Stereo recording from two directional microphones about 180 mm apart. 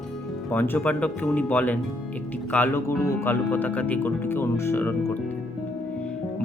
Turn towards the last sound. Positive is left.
turn(degrees=10)  # may be behind; listen again after turning